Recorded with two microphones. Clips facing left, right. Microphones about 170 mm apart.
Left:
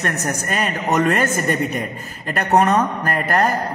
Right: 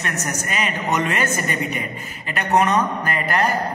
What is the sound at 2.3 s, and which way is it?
A woman's voice, 40° left (ahead or behind).